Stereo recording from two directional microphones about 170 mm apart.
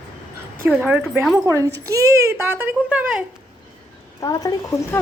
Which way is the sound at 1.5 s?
20° right (ahead or behind).